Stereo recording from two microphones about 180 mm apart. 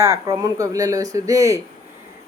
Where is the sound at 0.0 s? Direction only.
15° right (ahead or behind).